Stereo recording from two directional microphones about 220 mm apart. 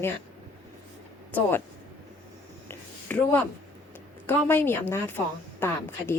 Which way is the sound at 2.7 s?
10° left (ahead or behind).